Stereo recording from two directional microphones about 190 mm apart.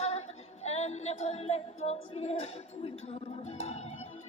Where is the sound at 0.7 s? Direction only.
35° left (ahead or behind).